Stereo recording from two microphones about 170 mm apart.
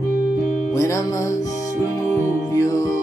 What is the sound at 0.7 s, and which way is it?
Music, 20° left (ahead or behind).